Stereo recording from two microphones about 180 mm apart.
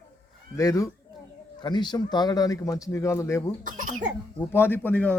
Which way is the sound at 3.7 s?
45° right (ahead or behind).